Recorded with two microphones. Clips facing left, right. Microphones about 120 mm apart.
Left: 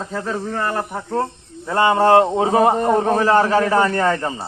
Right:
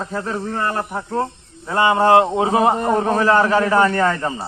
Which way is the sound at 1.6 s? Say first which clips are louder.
Even; 40° left (ahead or behind).